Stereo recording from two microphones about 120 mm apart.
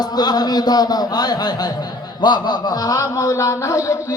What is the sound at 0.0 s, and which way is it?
Speech, 35° left (ahead or behind).